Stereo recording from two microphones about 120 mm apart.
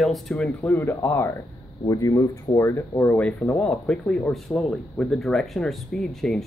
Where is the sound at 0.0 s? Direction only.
Centre (ahead or behind).